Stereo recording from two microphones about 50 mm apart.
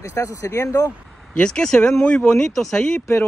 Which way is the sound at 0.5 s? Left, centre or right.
Left.